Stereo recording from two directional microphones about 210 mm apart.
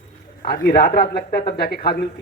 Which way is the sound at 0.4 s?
45° left (ahead or behind).